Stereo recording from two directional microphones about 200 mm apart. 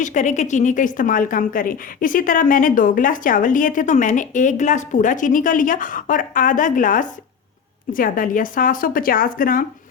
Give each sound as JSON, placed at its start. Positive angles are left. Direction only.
{"t": 0.0, "sound": "a woman's voice", "side_deg": 40}